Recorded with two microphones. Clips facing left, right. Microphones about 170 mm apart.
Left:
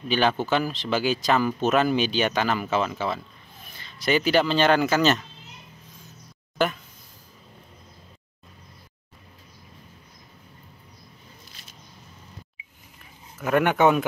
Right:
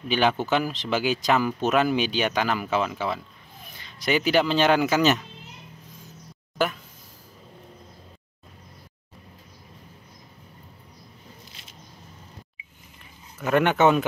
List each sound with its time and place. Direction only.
0.1 s speech: 15° right (ahead or behind)
13.4 s speech: 5° left (ahead or behind)